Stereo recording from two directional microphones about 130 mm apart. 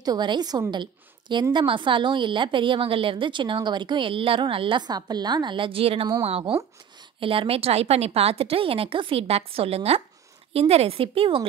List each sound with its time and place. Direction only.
0.0 s a woman's voice: 30° right (ahead or behind)